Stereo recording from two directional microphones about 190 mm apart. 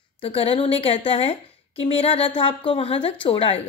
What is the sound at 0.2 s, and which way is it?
A woman's voice, 30° left (ahead or behind).